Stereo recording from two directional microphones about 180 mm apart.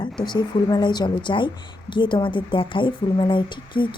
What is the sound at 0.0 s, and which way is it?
A woman's voice, 25° left (ahead or behind).